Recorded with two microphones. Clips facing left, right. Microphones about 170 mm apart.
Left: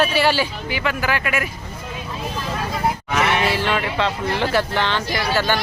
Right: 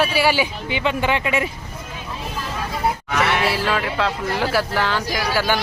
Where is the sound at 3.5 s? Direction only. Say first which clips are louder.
Even; centre (ahead or behind).